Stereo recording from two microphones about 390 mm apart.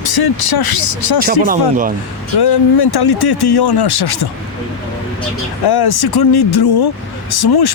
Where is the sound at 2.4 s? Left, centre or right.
Left.